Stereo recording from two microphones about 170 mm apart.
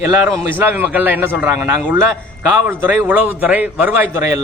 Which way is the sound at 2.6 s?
10° right (ahead or behind).